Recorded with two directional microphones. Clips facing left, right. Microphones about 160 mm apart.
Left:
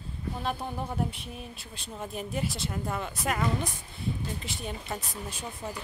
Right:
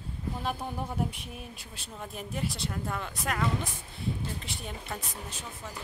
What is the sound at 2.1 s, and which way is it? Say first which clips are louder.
Speech: left 2 dB; centre (ahead or behind).